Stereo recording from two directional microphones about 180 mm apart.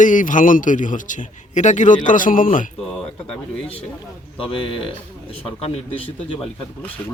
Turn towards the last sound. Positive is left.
turn(degrees=35)  # may be behind; listen again after turning